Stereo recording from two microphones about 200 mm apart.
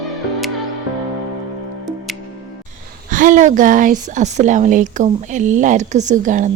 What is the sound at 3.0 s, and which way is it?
A woman's voice, 40° right (ahead or behind).